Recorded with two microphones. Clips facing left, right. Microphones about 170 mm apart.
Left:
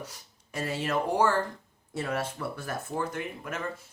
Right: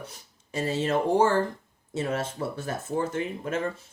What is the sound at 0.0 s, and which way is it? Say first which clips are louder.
Speech: even; 25° right (ahead or behind).